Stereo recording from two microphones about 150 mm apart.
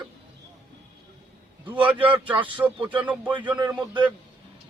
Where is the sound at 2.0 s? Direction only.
35° right (ahead or behind).